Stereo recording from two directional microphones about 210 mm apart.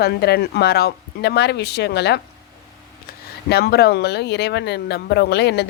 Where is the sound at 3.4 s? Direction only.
50° left (ahead or behind).